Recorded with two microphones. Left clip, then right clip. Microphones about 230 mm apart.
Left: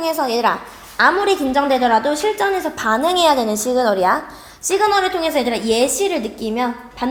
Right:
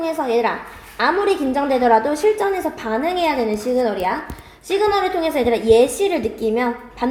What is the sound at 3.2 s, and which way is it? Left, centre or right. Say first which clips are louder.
Speech: left 5 dB; left.